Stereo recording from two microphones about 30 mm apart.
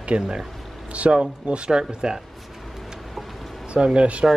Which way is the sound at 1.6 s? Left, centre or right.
Right.